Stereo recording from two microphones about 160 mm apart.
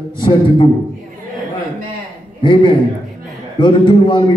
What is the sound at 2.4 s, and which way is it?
A man's voice, 30° left (ahead or behind).